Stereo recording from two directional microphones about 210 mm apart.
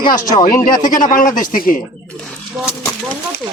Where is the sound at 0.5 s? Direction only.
40° left (ahead or behind).